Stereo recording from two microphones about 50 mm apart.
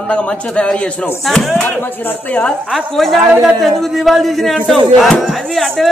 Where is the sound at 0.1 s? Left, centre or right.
Left.